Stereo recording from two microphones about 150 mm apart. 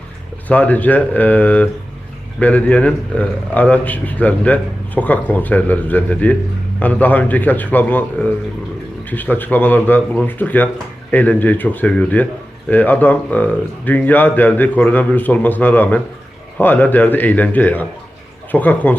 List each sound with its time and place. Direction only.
0.4 s speech: 10° left (ahead or behind)